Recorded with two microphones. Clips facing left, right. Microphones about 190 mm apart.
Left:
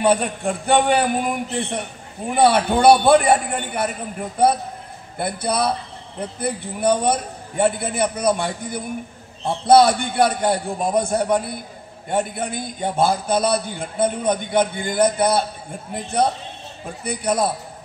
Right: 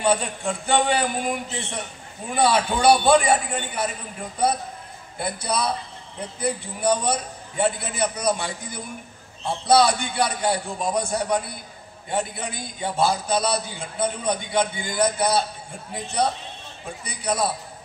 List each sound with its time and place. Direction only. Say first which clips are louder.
0.0 s a man's voice: left 4 dB; 55° left (ahead or behind)
5.2 s a man's voice: left 4 dB; 55° left (ahead or behind)